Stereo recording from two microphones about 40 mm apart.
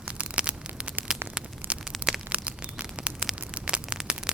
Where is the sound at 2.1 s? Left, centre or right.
Centre.